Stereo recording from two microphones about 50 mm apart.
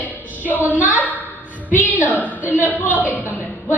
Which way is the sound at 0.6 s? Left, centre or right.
Right.